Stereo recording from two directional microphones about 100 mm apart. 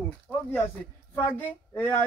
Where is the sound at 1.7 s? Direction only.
20° left (ahead or behind).